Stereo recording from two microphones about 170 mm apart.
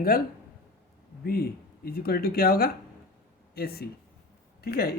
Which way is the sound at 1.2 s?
65° left (ahead or behind).